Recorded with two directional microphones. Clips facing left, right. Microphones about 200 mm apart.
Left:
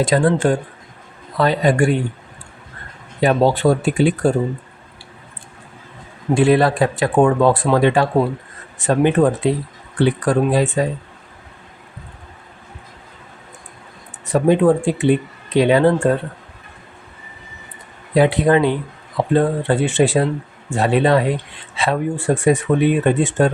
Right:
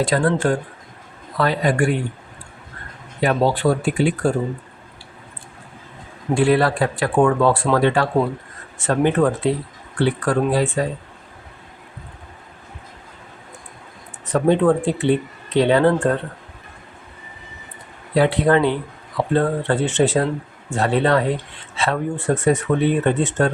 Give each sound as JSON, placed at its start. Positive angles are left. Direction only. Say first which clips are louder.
{"t": 0.0, "sound": "speech", "louder": "left 3 dB", "side_deg": 20}
{"t": 3.2, "sound": "speech", "louder": "left 3 dB", "side_deg": 25}
{"t": 6.3, "sound": "speech", "louder": "left 3 dB", "side_deg": 20}
{"t": 14.3, "sound": "speech", "louder": "left 2 dB", "side_deg": 10}
{"t": 18.1, "sound": "speech", "louder": "left 2 dB", "side_deg": 15}